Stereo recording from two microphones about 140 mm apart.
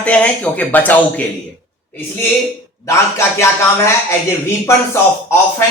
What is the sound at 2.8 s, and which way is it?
A man's voice, 20° left (ahead or behind).